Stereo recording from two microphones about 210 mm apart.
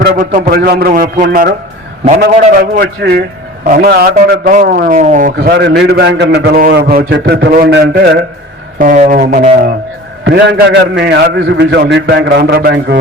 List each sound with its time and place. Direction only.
0.0 s a man's voice: 45° right (ahead or behind)